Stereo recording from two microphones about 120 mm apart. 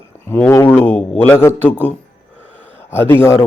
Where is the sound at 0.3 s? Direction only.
20° left (ahead or behind).